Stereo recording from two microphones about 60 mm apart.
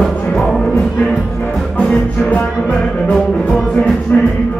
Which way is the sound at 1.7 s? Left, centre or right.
Centre.